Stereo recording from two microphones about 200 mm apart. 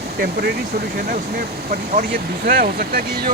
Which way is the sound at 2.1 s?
50° right (ahead or behind).